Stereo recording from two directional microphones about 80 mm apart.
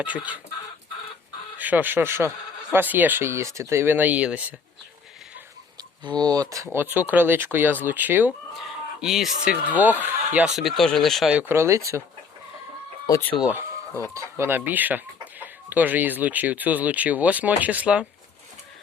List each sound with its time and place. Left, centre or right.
0.0 s speech: centre
1.5 s speech: right
3.9 s speech: centre
6.1 s speech: right
6.7 s speech: right
9.0 s speech: centre
9.5 s speech: centre
10.5 s speech: centre
11.4 s speech: right
13.1 s speech: left
13.5 s chicken: right
14.1 s speech: right; by 18.0 s centre